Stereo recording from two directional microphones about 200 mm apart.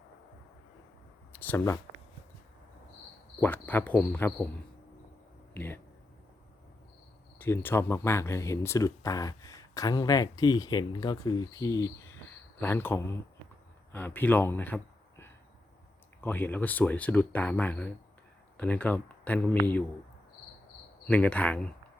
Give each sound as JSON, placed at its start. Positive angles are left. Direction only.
{"t": 1.3, "sound": "speech", "side_deg": 10}
{"t": 3.4, "sound": "speech", "side_deg": 10}
{"t": 5.5, "sound": "speech", "side_deg": 10}
{"t": 7.3, "sound": "a man's voice", "side_deg": 10}
{"t": 21.1, "sound": "speech", "side_deg": 5}